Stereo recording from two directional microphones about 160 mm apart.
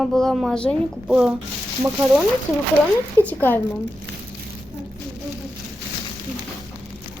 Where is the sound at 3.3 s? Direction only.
10° left (ahead or behind).